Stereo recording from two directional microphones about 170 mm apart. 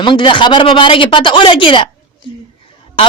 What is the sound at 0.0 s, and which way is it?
A man's voice, 30° left (ahead or behind).